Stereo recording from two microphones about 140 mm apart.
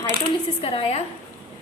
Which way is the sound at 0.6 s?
45° left (ahead or behind).